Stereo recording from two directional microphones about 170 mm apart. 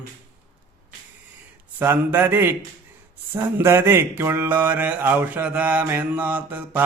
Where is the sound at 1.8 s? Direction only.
10° right (ahead or behind).